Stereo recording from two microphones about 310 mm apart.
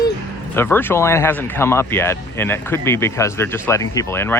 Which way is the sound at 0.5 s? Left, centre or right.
Centre.